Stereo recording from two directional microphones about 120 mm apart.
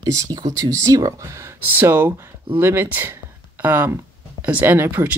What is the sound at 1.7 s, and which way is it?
Speech, 20° right (ahead or behind).